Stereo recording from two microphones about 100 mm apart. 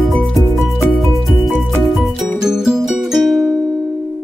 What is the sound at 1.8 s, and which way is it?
Music, centre (ahead or behind).